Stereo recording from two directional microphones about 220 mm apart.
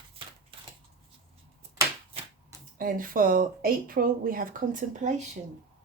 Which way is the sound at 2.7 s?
40° right (ahead or behind).